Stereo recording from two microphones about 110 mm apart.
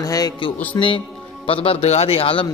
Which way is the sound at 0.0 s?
35° left (ahead or behind).